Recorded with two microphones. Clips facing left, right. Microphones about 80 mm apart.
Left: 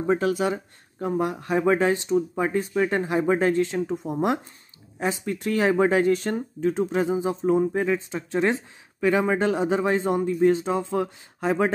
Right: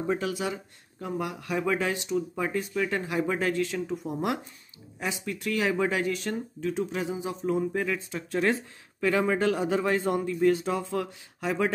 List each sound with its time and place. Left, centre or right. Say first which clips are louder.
0.0 s speech: left 6 dB; left